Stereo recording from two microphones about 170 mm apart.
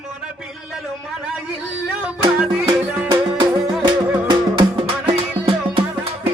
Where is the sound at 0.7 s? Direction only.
Centre (ahead or behind).